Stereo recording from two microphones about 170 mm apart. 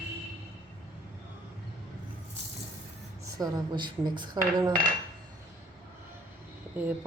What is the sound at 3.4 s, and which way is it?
Speech, 25° right (ahead or behind).